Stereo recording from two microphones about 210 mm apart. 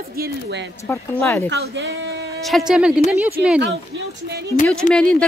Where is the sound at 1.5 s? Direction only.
55° right (ahead or behind).